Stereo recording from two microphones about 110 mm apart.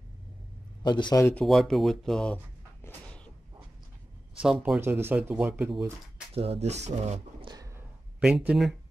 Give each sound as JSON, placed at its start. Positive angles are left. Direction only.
{"t": 0.8, "sound": "speech", "side_deg": 45}
{"t": 1.4, "sound": "speech", "side_deg": 0}
{"t": 2.3, "sound": "a sound", "side_deg": 20}
{"t": 4.4, "sound": "speech", "side_deg": -5}
{"t": 4.7, "sound": "speech", "side_deg": -20}
{"t": 6.3, "sound": "speech", "side_deg": -70}
{"t": 7.4, "sound": "a sound", "side_deg": -35}
{"t": 8.2, "sound": "speech", "side_deg": -5}